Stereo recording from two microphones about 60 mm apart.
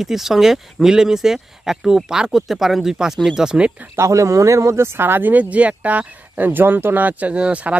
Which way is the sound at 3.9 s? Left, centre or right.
Right.